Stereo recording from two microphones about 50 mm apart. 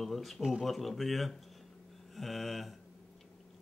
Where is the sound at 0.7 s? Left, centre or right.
Centre.